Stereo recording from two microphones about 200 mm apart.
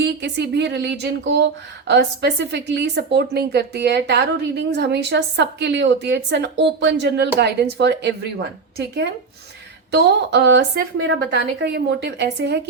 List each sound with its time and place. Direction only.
0.0 s a woman's voice: 60° right (ahead or behind)
9.9 s a woman's voice: 60° right (ahead or behind)